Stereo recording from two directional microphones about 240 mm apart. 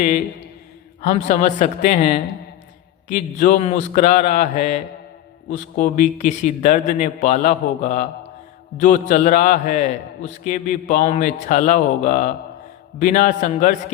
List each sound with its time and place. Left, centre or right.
1.0 s a man's voice: left